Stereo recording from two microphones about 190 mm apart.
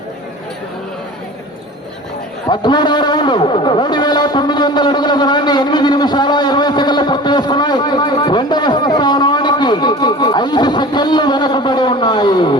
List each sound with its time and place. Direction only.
2.5 s a man's voice: 25° left (ahead or behind)